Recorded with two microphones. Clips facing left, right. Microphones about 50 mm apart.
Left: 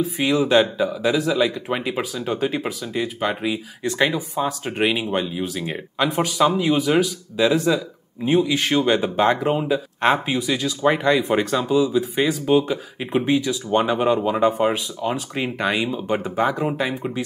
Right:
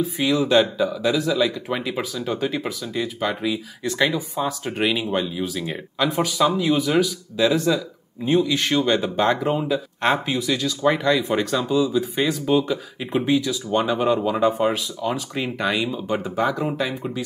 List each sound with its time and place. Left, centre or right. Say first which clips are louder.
0.2 s speech: left 1 dB; centre
6.8 s speech: left 1 dB; left
7.4 s speech: left 1 dB; centre